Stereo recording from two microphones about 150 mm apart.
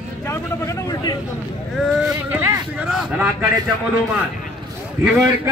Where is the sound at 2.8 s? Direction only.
5° right (ahead or behind).